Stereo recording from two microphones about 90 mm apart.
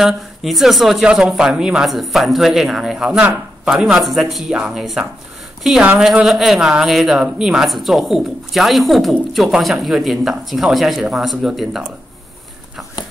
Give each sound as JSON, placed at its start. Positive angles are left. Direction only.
{"t": 0.0, "sound": "speech", "side_deg": 0}
{"t": 3.2, "sound": "speech", "side_deg": -15}
{"t": 3.7, "sound": "speech", "side_deg": -5}